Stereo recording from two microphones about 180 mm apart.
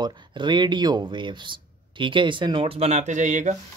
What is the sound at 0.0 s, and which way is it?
Speech, 25° right (ahead or behind).